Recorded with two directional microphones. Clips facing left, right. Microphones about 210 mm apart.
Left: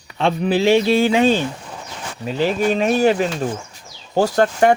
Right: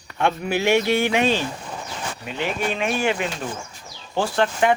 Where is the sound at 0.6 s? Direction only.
15° right (ahead or behind).